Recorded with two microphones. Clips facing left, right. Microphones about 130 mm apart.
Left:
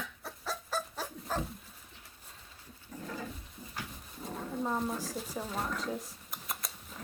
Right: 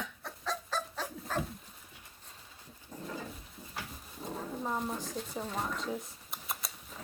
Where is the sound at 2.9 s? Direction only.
20° right (ahead or behind).